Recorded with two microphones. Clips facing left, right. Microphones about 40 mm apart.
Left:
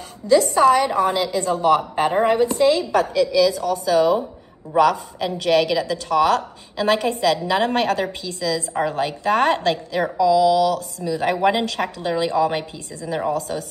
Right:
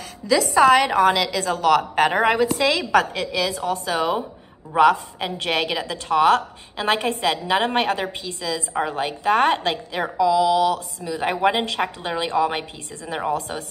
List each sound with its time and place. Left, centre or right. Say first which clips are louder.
0.2 s a woman's voice: left 1 dB; right
2.6 s a woman's voice: left 2 dB; right
3.2 s a woman's voice: left 7 dB; right
8.7 s a woman's voice: left 2 dB; centre; by 13.7 s right